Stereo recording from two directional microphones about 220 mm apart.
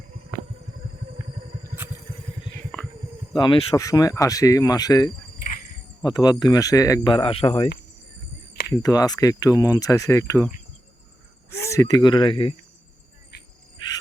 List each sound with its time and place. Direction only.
1.6 s vehicle: 10° right (ahead or behind)
3.3 s speech: 20° left (ahead or behind)
5.4 s insect: 35° left (ahead or behind)
6.0 s speech: 20° left (ahead or behind)
8.8 s speech: 15° left (ahead or behind)
11.5 s speech: 15° left (ahead or behind)